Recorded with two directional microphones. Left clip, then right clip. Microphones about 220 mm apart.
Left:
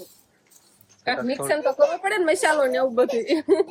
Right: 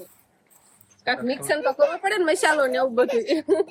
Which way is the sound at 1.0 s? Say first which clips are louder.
Even; 5° left (ahead or behind).